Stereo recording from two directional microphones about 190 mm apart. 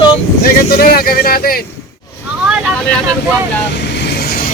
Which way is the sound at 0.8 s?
50° left (ahead or behind).